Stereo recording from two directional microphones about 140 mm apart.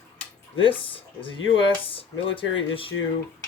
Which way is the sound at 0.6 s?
40° left (ahead or behind).